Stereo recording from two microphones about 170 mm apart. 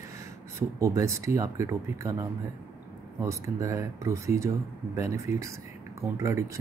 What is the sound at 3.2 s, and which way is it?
Speech, 15° right (ahead or behind).